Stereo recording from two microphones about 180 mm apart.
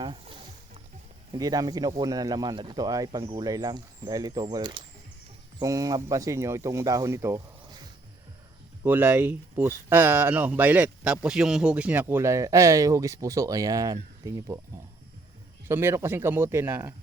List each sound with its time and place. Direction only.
0.0 s boat: 30° right (ahead or behind)
1.3 s speech: 20° right (ahead or behind)
15.6 s speech: 15° right (ahead or behind)